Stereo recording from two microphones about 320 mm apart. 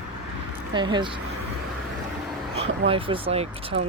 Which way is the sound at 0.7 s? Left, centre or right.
Centre.